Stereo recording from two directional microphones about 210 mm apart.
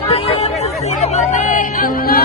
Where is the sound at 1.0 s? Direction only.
35° left (ahead or behind).